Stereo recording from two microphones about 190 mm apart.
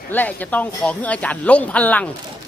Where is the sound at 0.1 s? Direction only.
10° left (ahead or behind).